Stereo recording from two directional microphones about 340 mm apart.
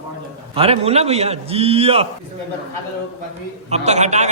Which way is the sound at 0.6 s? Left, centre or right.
Centre.